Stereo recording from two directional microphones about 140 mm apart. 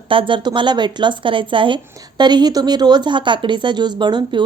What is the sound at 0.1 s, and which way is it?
Speech, 35° right (ahead or behind).